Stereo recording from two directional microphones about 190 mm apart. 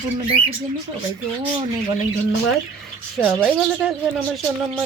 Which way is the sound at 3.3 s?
5° right (ahead or behind).